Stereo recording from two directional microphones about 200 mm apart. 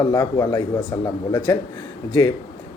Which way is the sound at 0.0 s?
20° left (ahead or behind).